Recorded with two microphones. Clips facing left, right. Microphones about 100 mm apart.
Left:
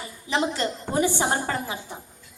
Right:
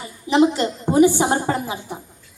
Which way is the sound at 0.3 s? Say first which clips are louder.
Right 8 dB; 20° right (ahead or behind).